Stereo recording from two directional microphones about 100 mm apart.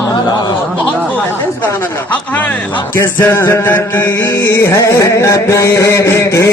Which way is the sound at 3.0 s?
20° left (ahead or behind).